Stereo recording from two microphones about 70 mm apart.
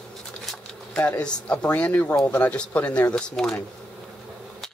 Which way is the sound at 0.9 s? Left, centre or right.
Centre.